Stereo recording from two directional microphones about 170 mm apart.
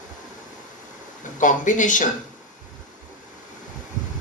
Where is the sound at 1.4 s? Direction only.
50° left (ahead or behind).